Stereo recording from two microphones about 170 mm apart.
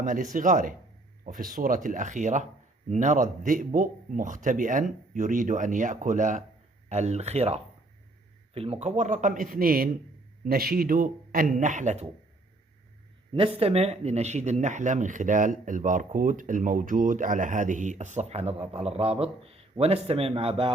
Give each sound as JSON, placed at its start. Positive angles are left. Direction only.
{"t": 0.0, "sound": "speech", "side_deg": -50}
{"t": 13.3, "sound": "speech", "side_deg": -35}